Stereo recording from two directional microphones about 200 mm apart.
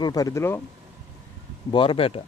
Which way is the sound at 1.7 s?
25° left (ahead or behind).